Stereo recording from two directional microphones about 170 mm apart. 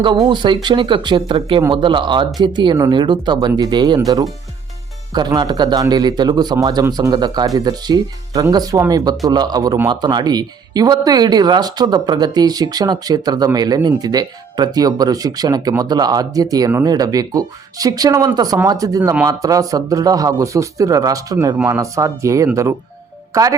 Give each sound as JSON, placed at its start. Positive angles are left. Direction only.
{"t": 0.0, "sound": "speech", "side_deg": -25}